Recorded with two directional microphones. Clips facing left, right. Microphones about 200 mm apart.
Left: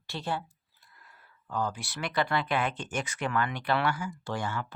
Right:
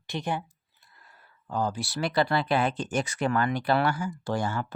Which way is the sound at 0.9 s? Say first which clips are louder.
Right 1 dB; 30° right (ahead or behind).